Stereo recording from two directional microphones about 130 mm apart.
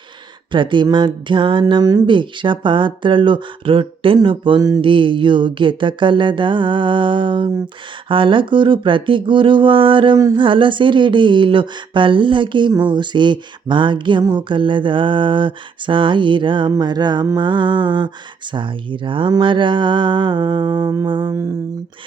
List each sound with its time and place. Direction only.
0.5 s speech: 40° right (ahead or behind)
10.2 s a sound: 25° right (ahead or behind)
10.4 s speech: 40° right (ahead or behind)